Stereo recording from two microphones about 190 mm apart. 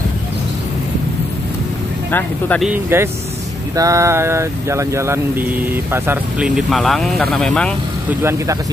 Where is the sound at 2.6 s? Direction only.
10° right (ahead or behind).